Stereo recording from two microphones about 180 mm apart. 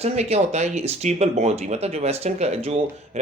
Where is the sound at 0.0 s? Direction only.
35° right (ahead or behind).